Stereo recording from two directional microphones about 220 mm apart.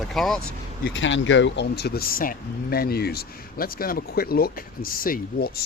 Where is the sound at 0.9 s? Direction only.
55° left (ahead or behind).